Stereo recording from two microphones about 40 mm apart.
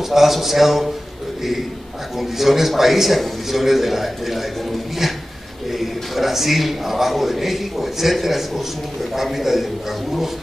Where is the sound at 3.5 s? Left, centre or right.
Centre.